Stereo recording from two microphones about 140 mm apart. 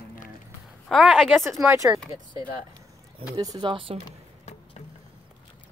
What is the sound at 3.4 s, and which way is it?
Speech, 30° right (ahead or behind).